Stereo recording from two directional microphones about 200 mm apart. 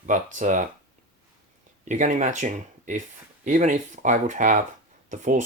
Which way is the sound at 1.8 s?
40° right (ahead or behind).